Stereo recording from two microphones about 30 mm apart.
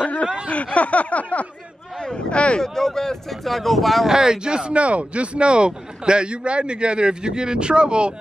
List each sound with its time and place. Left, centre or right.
0.5 s a sound: left
2.3 s speech: left
2.6 s speech: centre
3.3 s speech: centre
4.1 s speech: centre
4.5 s a man's voice: right